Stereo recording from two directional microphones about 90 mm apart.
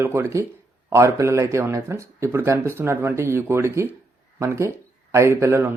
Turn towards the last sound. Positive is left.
turn(degrees=-30)  # may be behind; listen again after turning